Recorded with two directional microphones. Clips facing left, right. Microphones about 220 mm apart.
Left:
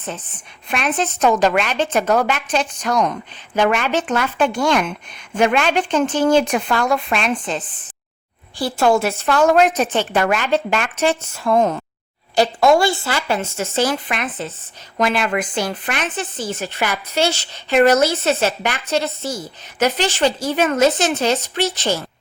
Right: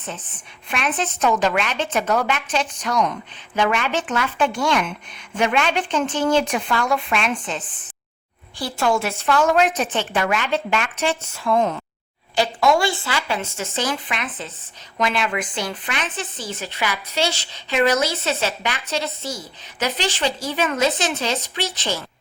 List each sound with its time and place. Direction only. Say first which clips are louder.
0.7 s a woman's voice: left 3 dB; 40° left (ahead or behind)